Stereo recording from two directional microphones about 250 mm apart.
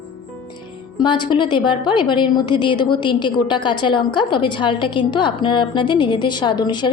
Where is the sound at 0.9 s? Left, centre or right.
Centre.